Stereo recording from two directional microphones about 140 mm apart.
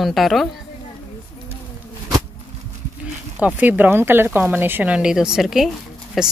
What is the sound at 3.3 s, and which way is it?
Speech, 10° right (ahead or behind).